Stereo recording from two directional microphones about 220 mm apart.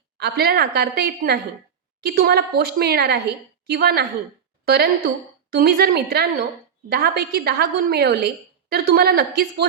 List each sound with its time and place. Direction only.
0.2 s a woman's voice: 45° right (ahead or behind)